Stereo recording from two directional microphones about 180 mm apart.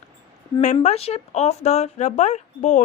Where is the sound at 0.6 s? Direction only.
40° left (ahead or behind).